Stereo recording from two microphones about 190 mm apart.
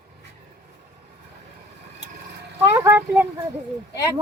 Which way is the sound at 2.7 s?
10° right (ahead or behind).